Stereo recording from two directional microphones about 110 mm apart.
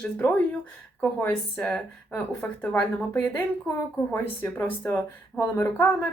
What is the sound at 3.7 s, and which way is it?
A woman's voice, 25° left (ahead or behind).